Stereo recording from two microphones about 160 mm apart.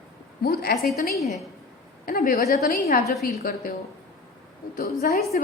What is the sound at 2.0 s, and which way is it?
A woman's voice, 60° left (ahead or behind).